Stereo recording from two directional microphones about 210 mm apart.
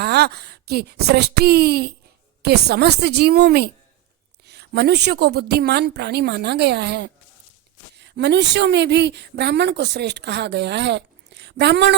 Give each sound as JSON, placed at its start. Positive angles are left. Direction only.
{"t": 0.0, "sound": "a woman's voice", "side_deg": -50}